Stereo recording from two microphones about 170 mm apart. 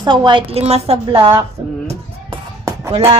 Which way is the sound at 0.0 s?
25° right (ahead or behind).